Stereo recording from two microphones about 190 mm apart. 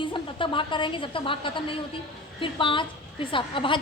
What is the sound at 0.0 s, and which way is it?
A woman's voice, 25° left (ahead or behind).